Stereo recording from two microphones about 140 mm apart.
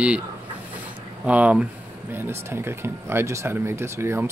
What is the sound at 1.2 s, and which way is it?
Speech, 10° right (ahead or behind).